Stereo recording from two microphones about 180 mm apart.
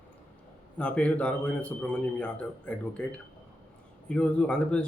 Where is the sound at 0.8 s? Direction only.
5° left (ahead or behind).